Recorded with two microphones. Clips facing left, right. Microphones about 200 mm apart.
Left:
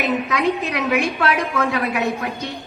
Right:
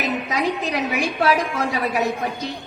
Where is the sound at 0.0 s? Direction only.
60° left (ahead or behind).